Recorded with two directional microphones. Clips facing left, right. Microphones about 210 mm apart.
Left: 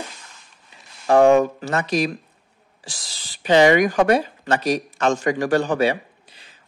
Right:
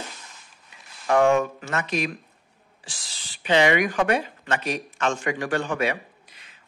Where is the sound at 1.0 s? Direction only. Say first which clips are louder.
Left 5 dB; 35° left (ahead or behind).